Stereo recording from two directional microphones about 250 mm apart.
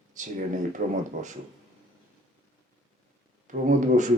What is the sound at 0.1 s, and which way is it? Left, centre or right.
Speech, right.